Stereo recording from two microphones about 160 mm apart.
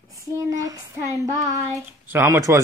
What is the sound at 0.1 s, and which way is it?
Child singing, 20° right (ahead or behind).